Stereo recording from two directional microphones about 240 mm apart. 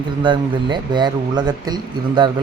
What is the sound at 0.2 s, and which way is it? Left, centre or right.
Speech, centre.